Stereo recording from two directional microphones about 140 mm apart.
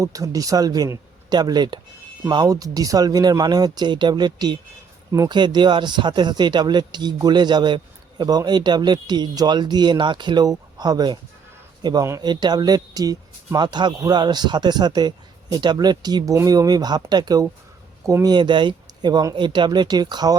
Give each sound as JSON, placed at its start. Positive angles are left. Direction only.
{"t": 0.0, "sound": "speech", "side_deg": -25}